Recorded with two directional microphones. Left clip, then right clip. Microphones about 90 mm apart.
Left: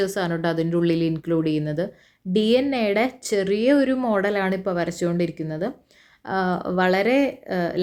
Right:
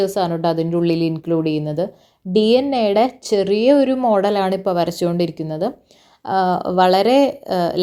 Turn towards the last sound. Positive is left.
turn(degrees=-35)  # may be behind; listen again after turning